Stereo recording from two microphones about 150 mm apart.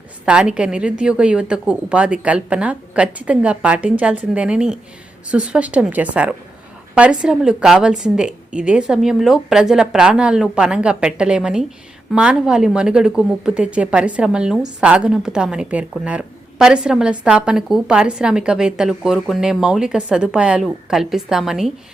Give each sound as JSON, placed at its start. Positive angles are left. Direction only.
{"t": 0.3, "sound": "a woman's voice", "side_deg": -5}